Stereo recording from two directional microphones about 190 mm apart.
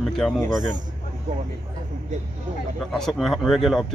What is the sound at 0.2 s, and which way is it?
Speech, 5° left (ahead or behind).